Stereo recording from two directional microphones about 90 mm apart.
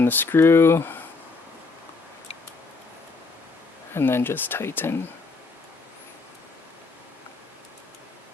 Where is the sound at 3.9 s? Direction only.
25° left (ahead or behind).